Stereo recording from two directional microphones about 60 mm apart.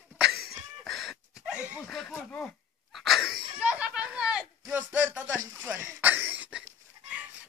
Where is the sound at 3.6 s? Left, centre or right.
Right.